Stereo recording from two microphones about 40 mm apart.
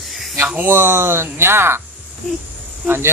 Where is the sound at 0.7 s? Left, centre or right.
Right.